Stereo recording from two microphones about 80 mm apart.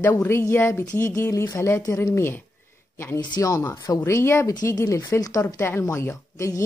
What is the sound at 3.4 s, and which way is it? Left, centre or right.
Speech, left.